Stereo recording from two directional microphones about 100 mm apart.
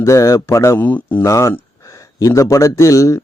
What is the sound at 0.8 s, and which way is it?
Speech, 20° left (ahead or behind).